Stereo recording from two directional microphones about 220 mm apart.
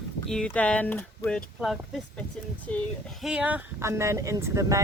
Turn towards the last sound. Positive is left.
turn(degrees=-15)  # may be behind; listen again after turning